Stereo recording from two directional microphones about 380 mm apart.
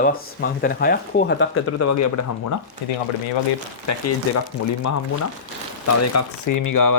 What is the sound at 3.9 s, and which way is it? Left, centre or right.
Speech, left.